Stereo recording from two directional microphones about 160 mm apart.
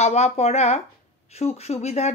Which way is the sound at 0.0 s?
40° left (ahead or behind).